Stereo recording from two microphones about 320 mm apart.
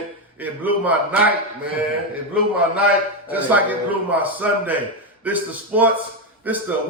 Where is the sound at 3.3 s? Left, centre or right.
Centre.